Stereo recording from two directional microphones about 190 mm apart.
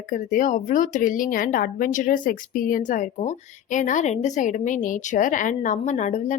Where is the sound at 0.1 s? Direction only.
45° left (ahead or behind).